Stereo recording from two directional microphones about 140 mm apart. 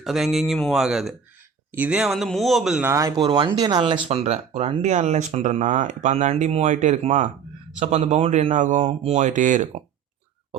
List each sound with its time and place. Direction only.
0.0 s speech: centre (ahead or behind)
2.8 s speech: 25° right (ahead or behind)
3.8 s speech: 40° right (ahead or behind); by 9.6 s 65° right (ahead or behind)